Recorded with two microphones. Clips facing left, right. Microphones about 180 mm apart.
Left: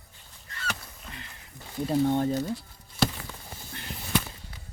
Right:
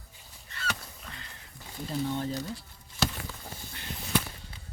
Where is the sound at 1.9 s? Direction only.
55° left (ahead or behind).